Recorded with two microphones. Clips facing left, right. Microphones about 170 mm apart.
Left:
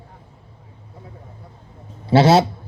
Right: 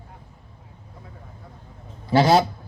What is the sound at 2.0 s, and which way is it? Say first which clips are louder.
Speech: left 3 dB; 30° left (ahead or behind).